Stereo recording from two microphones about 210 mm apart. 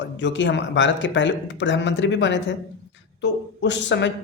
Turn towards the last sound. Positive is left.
turn(degrees=55)  # may be behind; listen again after turning